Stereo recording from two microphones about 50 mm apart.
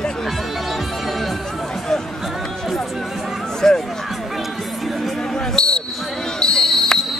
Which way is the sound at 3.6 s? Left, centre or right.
Centre.